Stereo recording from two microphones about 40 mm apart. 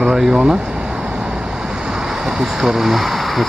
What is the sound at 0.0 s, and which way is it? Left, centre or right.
Vehicle, centre.